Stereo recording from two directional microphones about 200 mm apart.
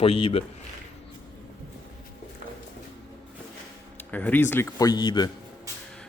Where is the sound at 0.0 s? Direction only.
30° left (ahead or behind).